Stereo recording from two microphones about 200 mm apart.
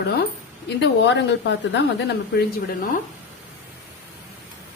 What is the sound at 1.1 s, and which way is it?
Speech, 60° left (ahead or behind).